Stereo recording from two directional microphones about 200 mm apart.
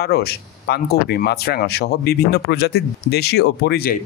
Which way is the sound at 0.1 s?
55° left (ahead or behind).